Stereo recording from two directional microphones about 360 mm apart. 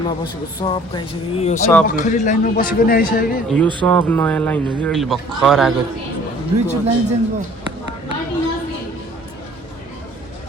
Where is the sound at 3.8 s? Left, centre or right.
Centre.